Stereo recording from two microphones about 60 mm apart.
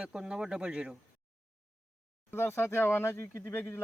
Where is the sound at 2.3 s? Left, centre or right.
Left.